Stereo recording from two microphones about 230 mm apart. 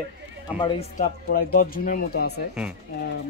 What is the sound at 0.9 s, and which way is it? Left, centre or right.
Speech, left.